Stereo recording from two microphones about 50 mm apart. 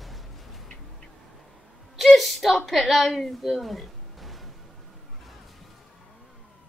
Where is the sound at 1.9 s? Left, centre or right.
Centre.